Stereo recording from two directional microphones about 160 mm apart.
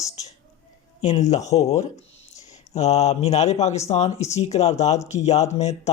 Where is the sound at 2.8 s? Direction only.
45° left (ahead or behind).